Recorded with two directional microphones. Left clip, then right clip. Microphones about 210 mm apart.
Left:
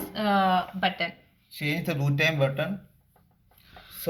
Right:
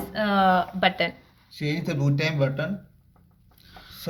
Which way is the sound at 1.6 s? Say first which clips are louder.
Even; 45° left (ahead or behind).